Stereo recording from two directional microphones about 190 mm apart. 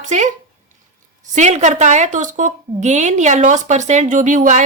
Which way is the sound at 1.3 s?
40° right (ahead or behind).